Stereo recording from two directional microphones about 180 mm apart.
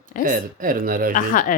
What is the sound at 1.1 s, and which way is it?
Speech, 50° left (ahead or behind).